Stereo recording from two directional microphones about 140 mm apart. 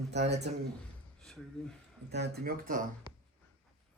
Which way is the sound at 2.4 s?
75° right (ahead or behind).